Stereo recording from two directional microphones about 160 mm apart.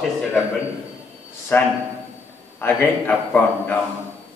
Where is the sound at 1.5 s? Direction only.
10° left (ahead or behind).